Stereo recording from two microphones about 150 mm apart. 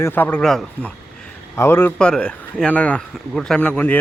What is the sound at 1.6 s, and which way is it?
Speech, 15° left (ahead or behind).